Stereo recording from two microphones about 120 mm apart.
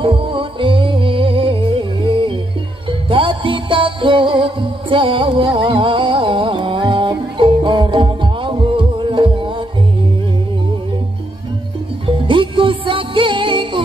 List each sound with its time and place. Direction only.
0.0 s music: 45° right (ahead or behind)
12.1 s music: 45° right (ahead or behind)